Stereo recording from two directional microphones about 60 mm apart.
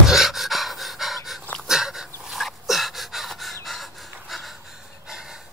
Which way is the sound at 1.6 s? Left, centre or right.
Centre.